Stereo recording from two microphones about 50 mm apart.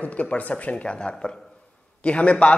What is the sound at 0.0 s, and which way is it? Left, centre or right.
Speech, left.